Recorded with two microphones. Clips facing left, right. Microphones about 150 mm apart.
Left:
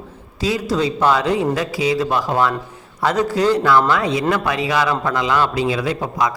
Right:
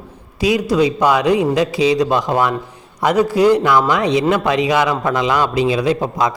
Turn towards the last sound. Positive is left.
turn(degrees=-25)  # may be behind; listen again after turning